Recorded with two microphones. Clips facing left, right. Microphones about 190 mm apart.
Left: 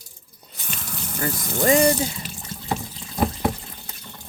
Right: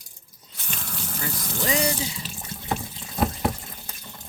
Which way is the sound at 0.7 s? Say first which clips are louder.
Left 1 dB; 5° left (ahead or behind).